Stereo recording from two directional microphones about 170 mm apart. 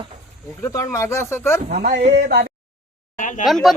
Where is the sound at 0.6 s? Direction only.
15° left (ahead or behind).